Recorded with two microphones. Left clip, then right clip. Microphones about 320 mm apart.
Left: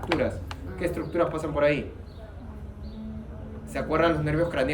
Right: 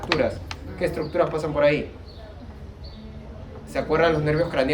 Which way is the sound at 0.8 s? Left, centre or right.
Centre.